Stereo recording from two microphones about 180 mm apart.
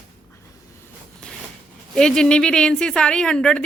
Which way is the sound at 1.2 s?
5° left (ahead or behind).